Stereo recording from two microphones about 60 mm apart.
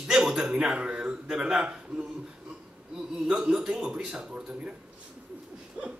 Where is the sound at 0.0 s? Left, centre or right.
Centre.